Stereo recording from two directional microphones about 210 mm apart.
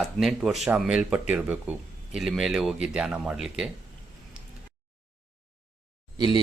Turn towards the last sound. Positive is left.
turn(degrees=-20)  # may be behind; listen again after turning